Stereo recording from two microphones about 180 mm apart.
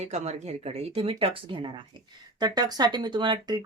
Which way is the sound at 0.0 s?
40° right (ahead or behind).